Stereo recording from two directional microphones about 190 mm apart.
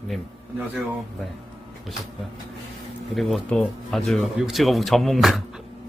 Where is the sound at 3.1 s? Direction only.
5° left (ahead or behind).